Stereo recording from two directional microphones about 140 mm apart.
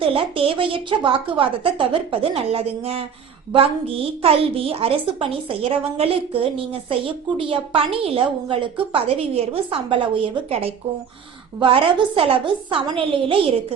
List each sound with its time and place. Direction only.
0.0 s a woman's voice: 40° right (ahead or behind)
4.2 s a woman's voice: 45° right (ahead or behind)